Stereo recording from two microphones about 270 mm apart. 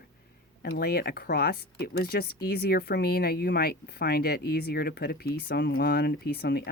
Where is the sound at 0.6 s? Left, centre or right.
Left.